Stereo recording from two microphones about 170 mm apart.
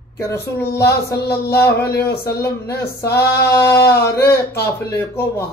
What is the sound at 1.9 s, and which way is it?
Speech, 70° left (ahead or behind).